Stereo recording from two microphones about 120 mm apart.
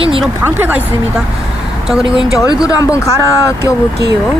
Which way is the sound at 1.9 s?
5° right (ahead or behind).